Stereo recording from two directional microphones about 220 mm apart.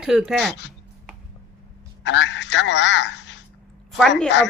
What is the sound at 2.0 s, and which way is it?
A man's voice, 55° left (ahead or behind).